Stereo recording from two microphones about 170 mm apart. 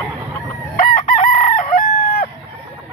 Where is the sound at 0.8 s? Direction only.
50° left (ahead or behind).